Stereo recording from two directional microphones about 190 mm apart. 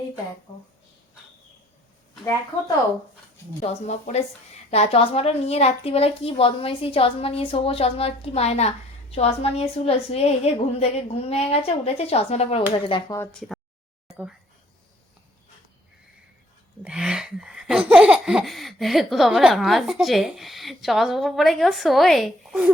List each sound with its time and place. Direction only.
3.6 s a woman's voice: 35° left (ahead or behind)
16.8 s laughter: 5° right (ahead or behind)